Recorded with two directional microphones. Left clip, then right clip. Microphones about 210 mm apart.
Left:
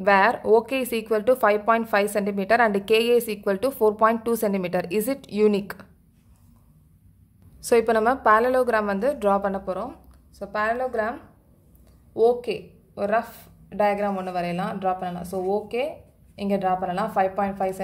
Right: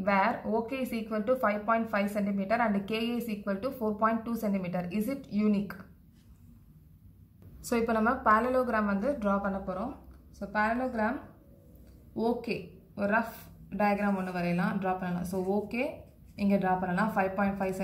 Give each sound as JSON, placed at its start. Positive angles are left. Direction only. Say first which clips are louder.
{"t": 0.0, "sound": "speech", "louder": "left 9 dB", "side_deg": 50}
{"t": 7.6, "sound": "speech", "louder": "left 9 dB", "side_deg": 45}
{"t": 12.2, "sound": "speech", "louder": "left 11 dB", "side_deg": 50}